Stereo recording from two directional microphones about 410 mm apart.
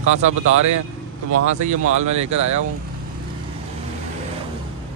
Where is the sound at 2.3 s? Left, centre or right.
Right.